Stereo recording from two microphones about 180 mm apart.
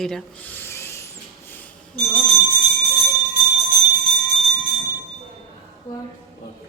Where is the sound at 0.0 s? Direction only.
5° left (ahead or behind).